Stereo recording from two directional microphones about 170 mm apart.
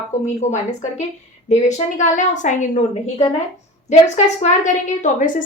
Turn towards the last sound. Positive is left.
turn(degrees=50)  # may be behind; listen again after turning